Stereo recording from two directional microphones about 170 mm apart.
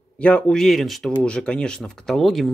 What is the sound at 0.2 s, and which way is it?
Speech, 5° left (ahead or behind).